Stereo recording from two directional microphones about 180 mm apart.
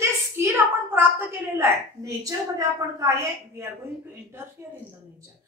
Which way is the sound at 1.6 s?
20° right (ahead or behind).